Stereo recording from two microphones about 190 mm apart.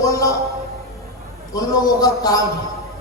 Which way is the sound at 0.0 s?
20° left (ahead or behind).